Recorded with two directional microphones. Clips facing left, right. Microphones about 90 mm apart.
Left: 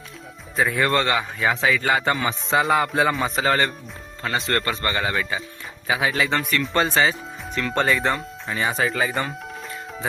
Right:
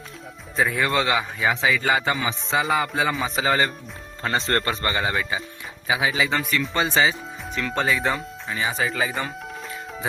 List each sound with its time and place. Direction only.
0.5 s a man's voice: centre (ahead or behind)
4.2 s a man's voice: 30° right (ahead or behind)
5.9 s speech: 5° right (ahead or behind)